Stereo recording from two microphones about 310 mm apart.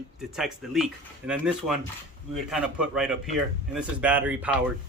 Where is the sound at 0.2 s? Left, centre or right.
Centre.